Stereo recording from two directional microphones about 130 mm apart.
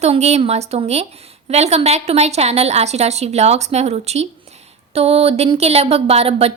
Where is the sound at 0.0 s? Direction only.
55° right (ahead or behind).